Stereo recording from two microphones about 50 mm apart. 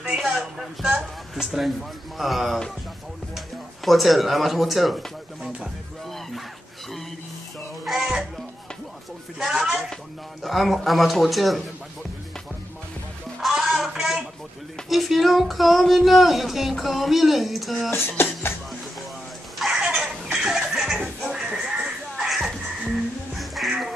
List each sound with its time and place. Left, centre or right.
0.2 s speech: centre
7.8 s music: centre
9.4 s speech: centre
13.5 s music: centre
14.9 s speech: centre
17.9 s speech: left
19.6 s a sound: centre
20.0 s laughter: centre
21.3 s a sound: centre
23.3 s music: centre